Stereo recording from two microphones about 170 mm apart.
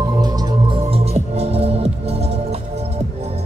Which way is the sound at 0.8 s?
35° right (ahead or behind).